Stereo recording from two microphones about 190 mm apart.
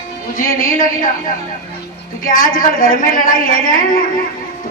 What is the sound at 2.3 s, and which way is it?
A woman's voice, 45° left (ahead or behind).